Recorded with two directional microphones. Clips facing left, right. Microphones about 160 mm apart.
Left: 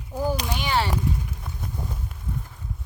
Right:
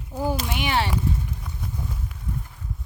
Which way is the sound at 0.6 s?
20° right (ahead or behind).